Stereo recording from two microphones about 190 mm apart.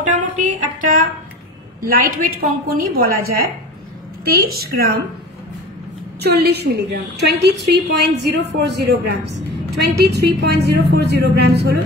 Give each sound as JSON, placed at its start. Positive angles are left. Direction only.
{"t": 0.1, "sound": "a sound", "side_deg": -40}
{"t": 2.4, "sound": "a woman's voice", "side_deg": -50}
{"t": 6.2, "sound": "a woman's voice", "side_deg": -60}